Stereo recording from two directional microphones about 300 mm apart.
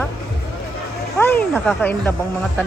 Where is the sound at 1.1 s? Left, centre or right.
Centre.